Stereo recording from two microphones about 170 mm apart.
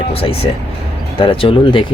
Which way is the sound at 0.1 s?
35° left (ahead or behind).